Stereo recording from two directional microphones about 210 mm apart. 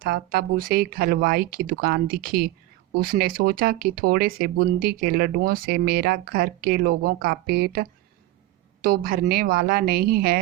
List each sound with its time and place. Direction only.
0.0 s speech: 45° right (ahead or behind)